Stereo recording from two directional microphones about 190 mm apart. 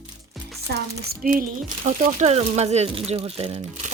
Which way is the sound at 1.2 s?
45° right (ahead or behind).